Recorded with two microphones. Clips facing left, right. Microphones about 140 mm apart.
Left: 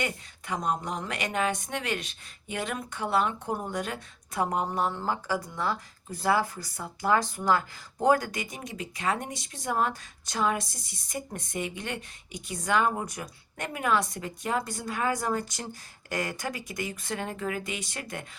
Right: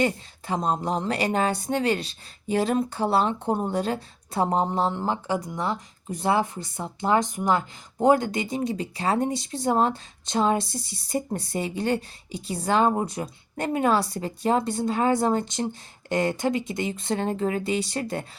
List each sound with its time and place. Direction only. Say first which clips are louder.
0.0 s speech: right 8 dB; 30° right (ahead or behind)